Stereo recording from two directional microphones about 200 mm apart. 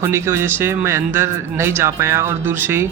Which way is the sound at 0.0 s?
15° right (ahead or behind).